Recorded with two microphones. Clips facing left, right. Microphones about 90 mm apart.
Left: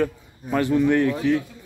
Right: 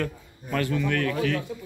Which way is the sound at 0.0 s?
20° left (ahead or behind).